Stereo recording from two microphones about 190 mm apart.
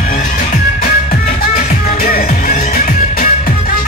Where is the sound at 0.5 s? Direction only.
50° left (ahead or behind).